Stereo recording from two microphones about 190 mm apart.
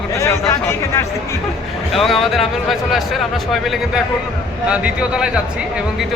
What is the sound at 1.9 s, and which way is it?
A man's voice, centre (ahead or behind).